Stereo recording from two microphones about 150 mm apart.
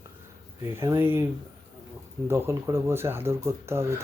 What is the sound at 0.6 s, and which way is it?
Speech, 20° right (ahead or behind).